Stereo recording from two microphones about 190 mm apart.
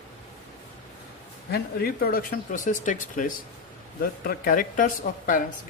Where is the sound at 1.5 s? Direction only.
55° left (ahead or behind).